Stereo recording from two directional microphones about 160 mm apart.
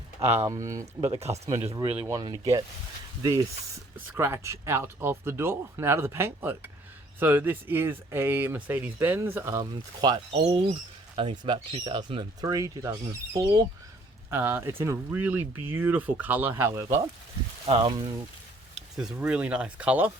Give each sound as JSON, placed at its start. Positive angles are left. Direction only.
{"t": 0.2, "sound": "speech", "side_deg": -15}
{"t": 3.9, "sound": "speech", "side_deg": -15}
{"t": 17.7, "sound": "speech", "side_deg": -35}
{"t": 18.9, "sound": "speech", "side_deg": -5}